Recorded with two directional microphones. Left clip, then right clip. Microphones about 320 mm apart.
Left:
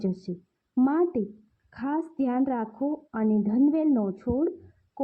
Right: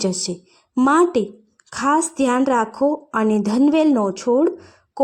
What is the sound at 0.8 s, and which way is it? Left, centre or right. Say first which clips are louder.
A woman's voice: right 9 dB; centre.